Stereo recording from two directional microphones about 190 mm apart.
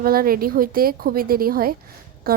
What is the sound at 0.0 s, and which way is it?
A woman's voice, 50° right (ahead or behind).